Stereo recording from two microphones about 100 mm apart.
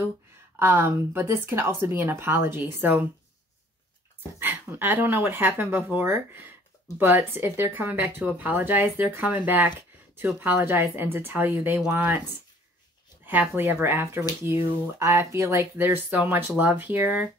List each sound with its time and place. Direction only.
0.6 s speech: 20° right (ahead or behind)
4.4 s speech: 20° right (ahead or behind)
13.2 s speech: 20° right (ahead or behind)